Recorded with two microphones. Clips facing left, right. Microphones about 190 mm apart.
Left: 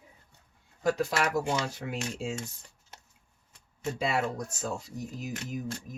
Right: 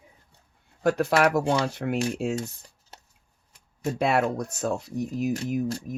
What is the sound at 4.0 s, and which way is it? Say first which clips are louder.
Speech: right 7 dB; 65° right (ahead or behind).